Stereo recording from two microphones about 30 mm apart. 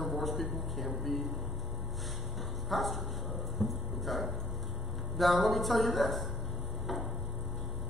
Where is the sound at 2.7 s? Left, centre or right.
Centre.